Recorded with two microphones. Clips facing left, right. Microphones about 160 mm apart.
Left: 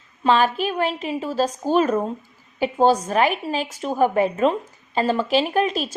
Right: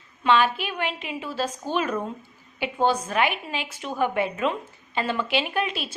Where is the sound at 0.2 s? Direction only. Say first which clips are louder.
Left 3 dB; 40° left (ahead or behind).